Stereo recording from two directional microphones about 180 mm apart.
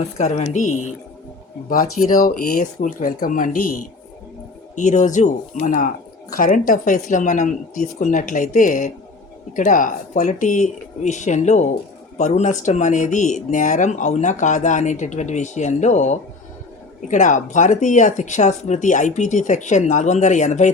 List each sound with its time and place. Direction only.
0.2 s speech: 40° left (ahead or behind)
2.0 s speech: 50° left (ahead or behind)
4.7 s speech: 45° left (ahead or behind)